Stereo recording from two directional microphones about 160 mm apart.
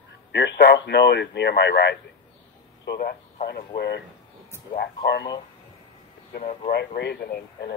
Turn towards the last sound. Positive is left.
turn(degrees=90)